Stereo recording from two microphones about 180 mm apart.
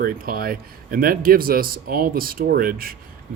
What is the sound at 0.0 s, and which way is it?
Speech, 55° right (ahead or behind).